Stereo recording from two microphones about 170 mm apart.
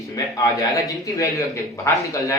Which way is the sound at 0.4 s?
20° left (ahead or behind).